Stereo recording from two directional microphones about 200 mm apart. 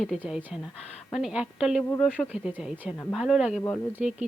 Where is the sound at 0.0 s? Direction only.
Centre (ahead or behind).